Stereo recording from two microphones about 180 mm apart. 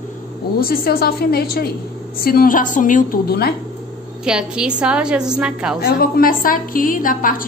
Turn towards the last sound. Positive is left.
turn(degrees=50)  # may be behind; listen again after turning